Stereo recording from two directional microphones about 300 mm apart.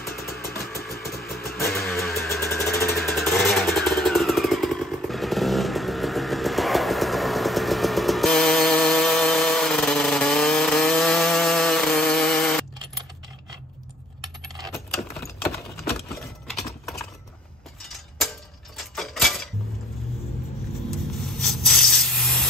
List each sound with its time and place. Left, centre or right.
0.0 s music: left
0.7 s vehicle: centre
1.8 s music: centre
14.6 s keys jangling: centre
16.1 s a sound: centre
18.8 s keys jangling: centre
21.4 s spray: centre